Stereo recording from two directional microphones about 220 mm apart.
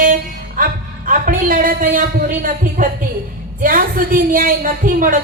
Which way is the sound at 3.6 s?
40° right (ahead or behind).